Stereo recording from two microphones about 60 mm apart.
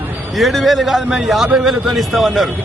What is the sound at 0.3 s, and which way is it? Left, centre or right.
A man's voice, centre.